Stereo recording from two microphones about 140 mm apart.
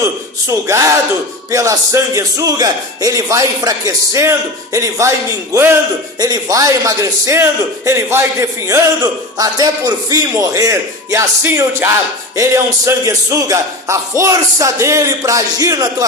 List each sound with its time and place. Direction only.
0.0 s speech: 20° right (ahead or behind)
6.1 s speech: 25° right (ahead or behind)